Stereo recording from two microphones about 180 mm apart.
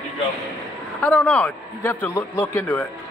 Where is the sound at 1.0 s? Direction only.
10° left (ahead or behind).